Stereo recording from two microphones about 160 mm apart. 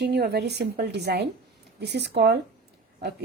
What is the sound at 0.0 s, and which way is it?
A woman's voice, 90° right.